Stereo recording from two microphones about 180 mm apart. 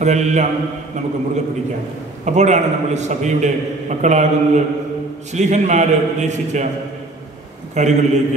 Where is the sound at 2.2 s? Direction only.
40° right (ahead or behind).